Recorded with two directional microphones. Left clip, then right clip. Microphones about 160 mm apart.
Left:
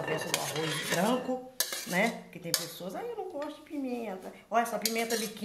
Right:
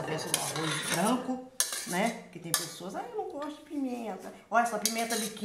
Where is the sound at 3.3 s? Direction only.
15° left (ahead or behind).